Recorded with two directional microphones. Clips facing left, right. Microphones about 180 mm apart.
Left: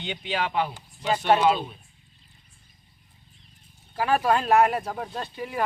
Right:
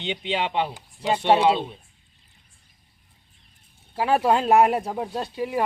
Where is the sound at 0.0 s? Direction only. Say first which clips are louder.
Right 3 dB; 20° right (ahead or behind).